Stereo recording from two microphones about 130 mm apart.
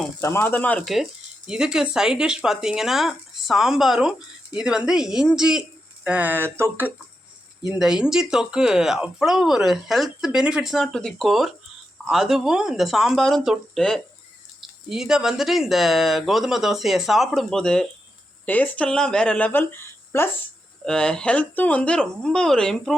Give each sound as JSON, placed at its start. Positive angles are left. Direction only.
{"t": 0.2, "sound": "speech", "side_deg": 20}
{"t": 1.5, "sound": "speech", "side_deg": -5}
{"t": 7.8, "sound": "speech", "side_deg": -5}
{"t": 20.8, "sound": "speech", "side_deg": 5}